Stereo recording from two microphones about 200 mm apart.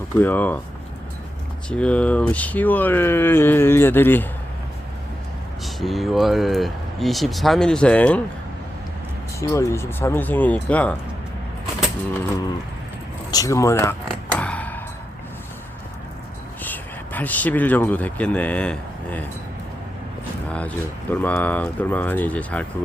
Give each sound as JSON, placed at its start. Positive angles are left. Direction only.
{"t": 0.2, "sound": "speech", "side_deg": 10}
{"t": 1.7, "sound": "speech", "side_deg": 5}
{"t": 5.6, "sound": "speech", "side_deg": 0}
{"t": 9.4, "sound": "speech", "side_deg": 15}
{"t": 13.3, "sound": "speech", "side_deg": 15}
{"t": 14.3, "sound": "music", "side_deg": 5}
{"t": 16.6, "sound": "a man's voice", "side_deg": 10}
{"t": 20.5, "sound": "speech", "side_deg": 5}